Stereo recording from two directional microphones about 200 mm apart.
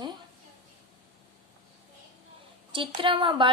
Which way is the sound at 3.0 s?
25° right (ahead or behind).